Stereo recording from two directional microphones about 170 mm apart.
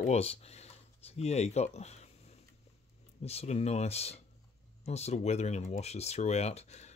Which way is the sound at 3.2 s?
40° left (ahead or behind).